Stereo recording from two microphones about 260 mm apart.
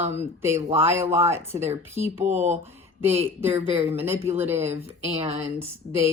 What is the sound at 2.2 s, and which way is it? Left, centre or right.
Speech, right.